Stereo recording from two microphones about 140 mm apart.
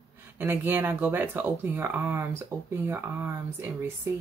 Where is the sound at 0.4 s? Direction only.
15° right (ahead or behind).